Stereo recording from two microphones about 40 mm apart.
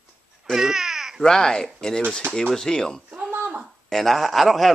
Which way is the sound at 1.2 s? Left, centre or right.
Centre.